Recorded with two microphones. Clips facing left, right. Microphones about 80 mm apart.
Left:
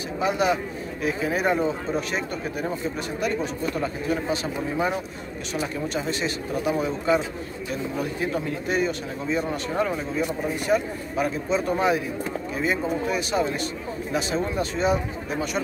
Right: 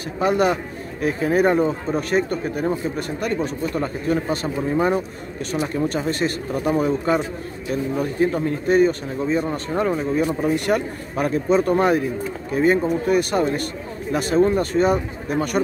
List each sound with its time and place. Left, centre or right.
0.2 s a man's voice: right
5.5 s a man's voice: right
10.1 s a man's voice: right